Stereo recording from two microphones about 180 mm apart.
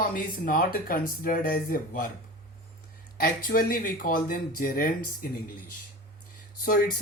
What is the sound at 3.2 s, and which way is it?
Speech, 50° left (ahead or behind).